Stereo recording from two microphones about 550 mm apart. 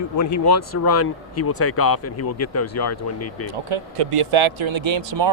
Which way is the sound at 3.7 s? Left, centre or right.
Right.